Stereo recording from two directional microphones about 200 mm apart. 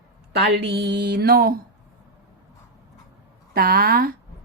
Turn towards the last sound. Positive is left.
turn(degrees=-45)  # may be behind; listen again after turning